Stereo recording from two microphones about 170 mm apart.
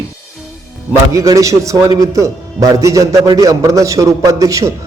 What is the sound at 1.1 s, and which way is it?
A man's voice, 20° right (ahead or behind).